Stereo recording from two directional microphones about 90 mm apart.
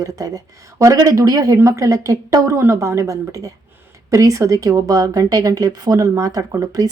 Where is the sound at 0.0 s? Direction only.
40° right (ahead or behind).